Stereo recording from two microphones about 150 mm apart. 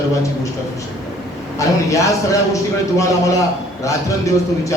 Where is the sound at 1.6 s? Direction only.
20° left (ahead or behind).